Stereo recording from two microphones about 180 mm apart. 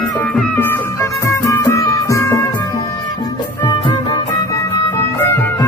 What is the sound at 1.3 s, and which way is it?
Music, 15° left (ahead or behind).